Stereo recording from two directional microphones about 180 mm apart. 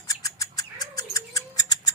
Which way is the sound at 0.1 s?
20° left (ahead or behind).